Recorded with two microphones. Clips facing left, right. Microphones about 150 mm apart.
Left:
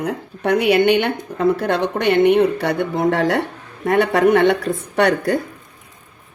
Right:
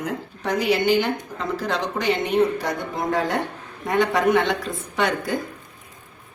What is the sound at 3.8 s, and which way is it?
Speech, 65° left (ahead or behind).